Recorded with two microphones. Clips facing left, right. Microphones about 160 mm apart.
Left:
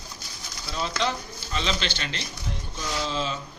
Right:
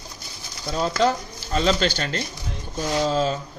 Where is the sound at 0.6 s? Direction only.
45° right (ahead or behind).